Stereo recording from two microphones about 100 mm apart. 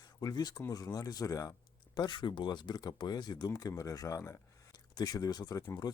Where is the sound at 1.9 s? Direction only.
50° left (ahead or behind); by 4.3 s 30° left (ahead or behind).